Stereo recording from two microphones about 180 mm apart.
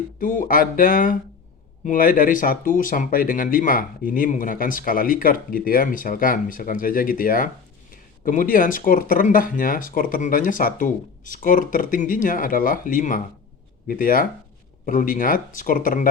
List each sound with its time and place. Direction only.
0.2 s speech: 50° left (ahead or behind)